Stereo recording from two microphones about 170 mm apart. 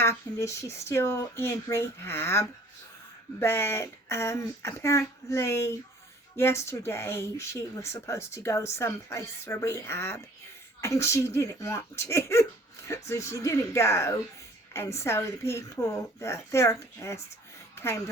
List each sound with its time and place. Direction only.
0.0 s speech: 15° left (ahead or behind)